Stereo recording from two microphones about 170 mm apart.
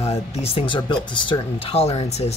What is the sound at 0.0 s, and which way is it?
Speech, 35° left (ahead or behind).